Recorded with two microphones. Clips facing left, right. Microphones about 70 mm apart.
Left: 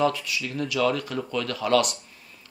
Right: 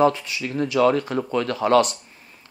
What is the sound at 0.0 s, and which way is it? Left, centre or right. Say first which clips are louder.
Speech: right 5 dB; right.